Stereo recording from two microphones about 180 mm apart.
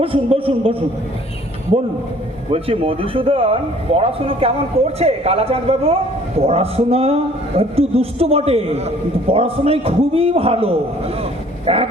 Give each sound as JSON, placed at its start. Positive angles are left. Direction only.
{"t": 0.0, "sound": "a man's voice", "side_deg": -30}
{"t": 2.5, "sound": "a man's voice", "side_deg": -30}